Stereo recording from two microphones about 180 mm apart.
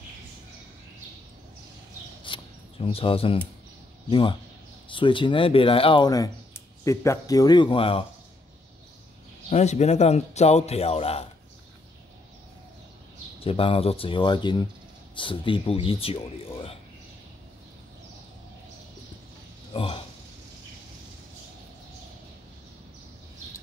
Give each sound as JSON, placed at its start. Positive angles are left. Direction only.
{"t": 2.2, "sound": "a sound", "side_deg": 30}
{"t": 4.1, "sound": "speech", "side_deg": 30}
{"t": 9.5, "sound": "a man's voice", "side_deg": 40}
{"t": 13.4, "sound": "a man's voice", "side_deg": 30}
{"t": 19.7, "sound": "speech", "side_deg": 30}